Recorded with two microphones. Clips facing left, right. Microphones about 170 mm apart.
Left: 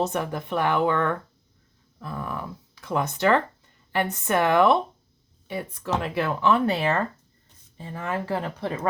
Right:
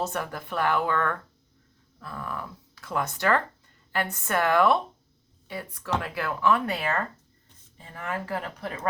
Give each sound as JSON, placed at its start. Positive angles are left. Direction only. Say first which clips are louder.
{"t": 0.0, "sound": "speech", "louder": "left 5 dB", "side_deg": 20}